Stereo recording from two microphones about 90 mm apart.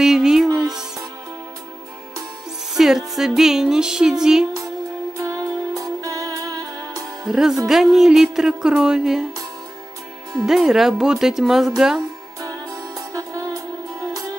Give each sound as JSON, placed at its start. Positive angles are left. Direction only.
{"t": 0.0, "sound": "music", "side_deg": -5}
{"t": 2.7, "sound": "music", "side_deg": -5}
{"t": 5.1, "sound": "music", "side_deg": -35}
{"t": 7.2, "sound": "speech", "side_deg": -5}
{"t": 10.4, "sound": "speech", "side_deg": -5}
{"t": 12.4, "sound": "music", "side_deg": -40}